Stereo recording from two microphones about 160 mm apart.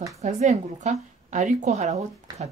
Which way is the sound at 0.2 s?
45° right (ahead or behind).